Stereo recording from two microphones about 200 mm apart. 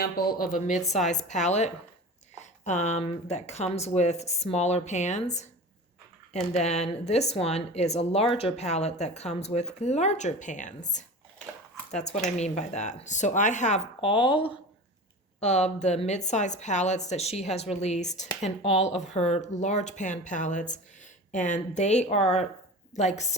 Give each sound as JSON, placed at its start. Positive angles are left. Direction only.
{"t": 0.0, "sound": "speech", "side_deg": 50}
{"t": 11.9, "sound": "speech", "side_deg": 35}